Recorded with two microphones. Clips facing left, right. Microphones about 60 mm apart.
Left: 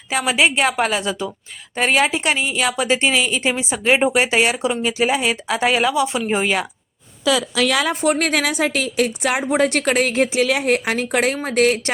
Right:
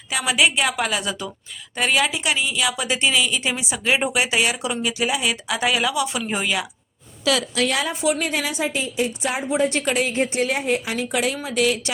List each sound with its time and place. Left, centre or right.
0.1 s a woman's voice: left
8.0 s a woman's voice: left
8.3 s a woman's voice: left